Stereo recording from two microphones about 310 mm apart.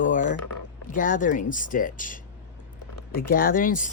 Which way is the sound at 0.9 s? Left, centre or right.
Left.